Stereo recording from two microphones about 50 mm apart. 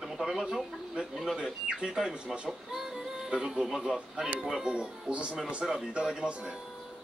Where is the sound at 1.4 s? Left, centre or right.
Centre.